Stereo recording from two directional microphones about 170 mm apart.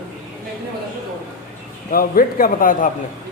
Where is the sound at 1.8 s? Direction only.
55° left (ahead or behind).